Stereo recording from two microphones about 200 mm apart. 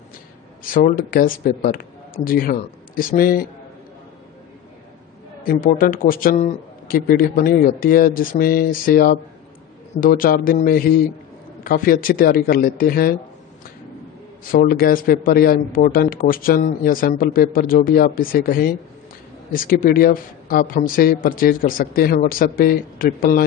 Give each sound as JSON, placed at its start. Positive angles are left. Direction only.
{"t": 0.7, "sound": "a man's voice", "side_deg": 45}
{"t": 5.4, "sound": "a man's voice", "side_deg": 45}
{"t": 14.5, "sound": "a man's voice", "side_deg": 45}